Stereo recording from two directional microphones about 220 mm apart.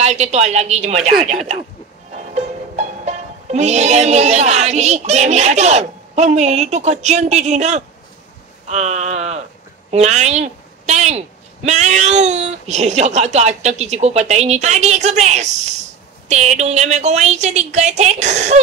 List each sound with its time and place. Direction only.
0.0 s a woman's voice: 30° right (ahead or behind)
8.6 s a sound: 30° right (ahead or behind)
9.8 s a woman's voice: 30° right (ahead or behind)